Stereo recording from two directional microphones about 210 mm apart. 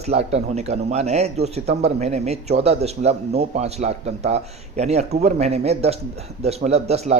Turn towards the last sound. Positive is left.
turn(degrees=-30)  # may be behind; listen again after turning